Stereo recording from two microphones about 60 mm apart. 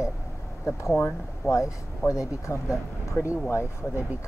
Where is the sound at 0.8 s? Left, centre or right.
Left.